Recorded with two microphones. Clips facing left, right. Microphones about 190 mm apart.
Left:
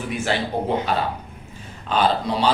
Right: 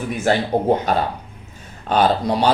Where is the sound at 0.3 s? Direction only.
45° right (ahead or behind).